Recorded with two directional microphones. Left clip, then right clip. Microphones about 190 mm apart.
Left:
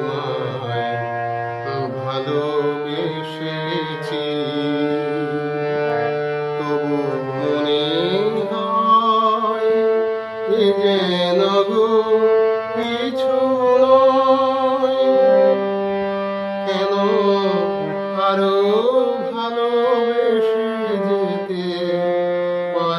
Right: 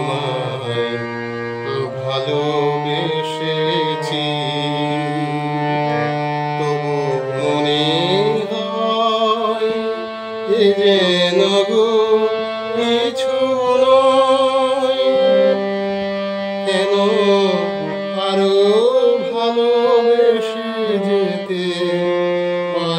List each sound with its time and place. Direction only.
7.7 s mantra: 10° right (ahead or behind)
8.7 s music: 10° right (ahead or behind)
10.6 s mantra: 5° right (ahead or behind)
12.2 s music: 35° right (ahead or behind)
13.7 s singing: 5° right (ahead or behind)
15.0 s music: 40° right (ahead or behind)
16.7 s music: 10° right (ahead or behind)